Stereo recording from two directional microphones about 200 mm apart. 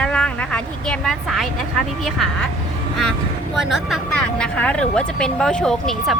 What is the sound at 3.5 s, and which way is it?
A woman's voice, centre (ahead or behind).